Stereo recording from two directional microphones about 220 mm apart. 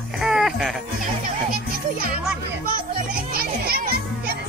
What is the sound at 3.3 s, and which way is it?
A child's voice, 45° right (ahead or behind).